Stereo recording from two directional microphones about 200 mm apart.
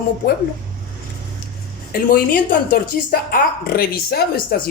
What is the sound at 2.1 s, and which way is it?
Speech, 45° left (ahead or behind).